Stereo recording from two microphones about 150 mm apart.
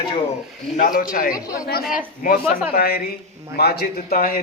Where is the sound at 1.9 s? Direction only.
65° left (ahead or behind).